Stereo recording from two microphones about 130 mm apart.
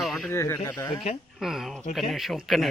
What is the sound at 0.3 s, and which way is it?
Speech, 20° left (ahead or behind).